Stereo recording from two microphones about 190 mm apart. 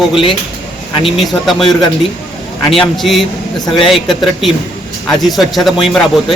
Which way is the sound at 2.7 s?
Centre (ahead or behind).